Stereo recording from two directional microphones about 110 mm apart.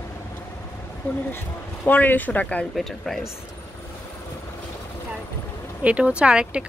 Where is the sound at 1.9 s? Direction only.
15° left (ahead or behind).